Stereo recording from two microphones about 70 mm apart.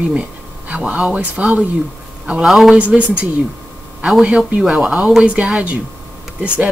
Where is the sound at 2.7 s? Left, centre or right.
Centre.